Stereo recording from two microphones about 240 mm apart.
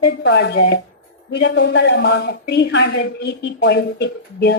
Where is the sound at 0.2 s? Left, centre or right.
Left.